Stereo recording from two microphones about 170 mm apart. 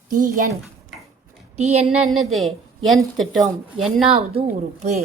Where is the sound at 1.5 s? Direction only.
40° right (ahead or behind).